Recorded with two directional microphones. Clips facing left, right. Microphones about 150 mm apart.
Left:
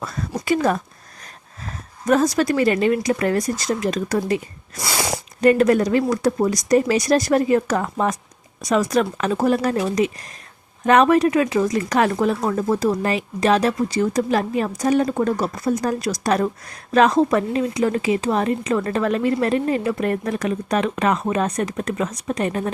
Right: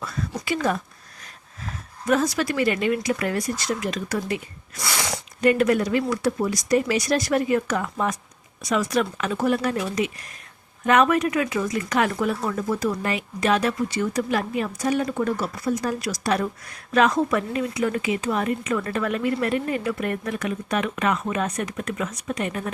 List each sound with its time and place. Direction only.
0.0 s a sound: 40° left (ahead or behind)
2.0 s a woman's voice: 40° left (ahead or behind)
4.8 s speech: 25° left (ahead or behind)
5.4 s a woman's voice: 40° left (ahead or behind)